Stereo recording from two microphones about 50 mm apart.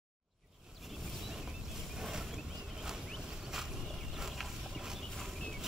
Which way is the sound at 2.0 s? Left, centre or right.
Centre.